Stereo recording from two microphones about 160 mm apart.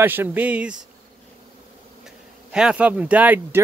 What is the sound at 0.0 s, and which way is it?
Speech, 10° right (ahead or behind).